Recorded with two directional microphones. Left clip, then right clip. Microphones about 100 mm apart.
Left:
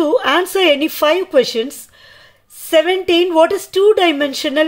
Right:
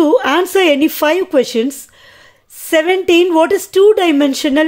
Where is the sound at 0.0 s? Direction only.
30° right (ahead or behind).